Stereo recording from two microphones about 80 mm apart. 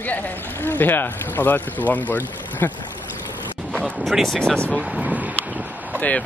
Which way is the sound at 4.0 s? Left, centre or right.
Centre.